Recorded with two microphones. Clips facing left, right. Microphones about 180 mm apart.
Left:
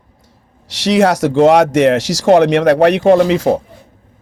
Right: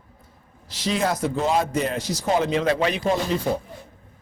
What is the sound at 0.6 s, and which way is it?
A man's voice, 75° left (ahead or behind).